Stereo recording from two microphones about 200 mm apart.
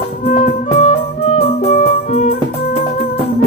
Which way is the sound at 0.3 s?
35° left (ahead or behind).